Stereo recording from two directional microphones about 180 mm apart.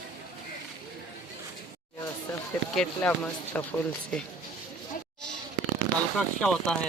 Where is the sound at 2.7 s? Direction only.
5° left (ahead or behind).